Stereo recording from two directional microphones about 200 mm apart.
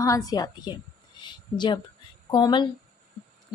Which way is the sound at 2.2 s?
20° left (ahead or behind).